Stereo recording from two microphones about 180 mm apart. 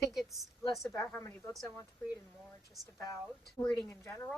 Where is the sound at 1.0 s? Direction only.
10° left (ahead or behind).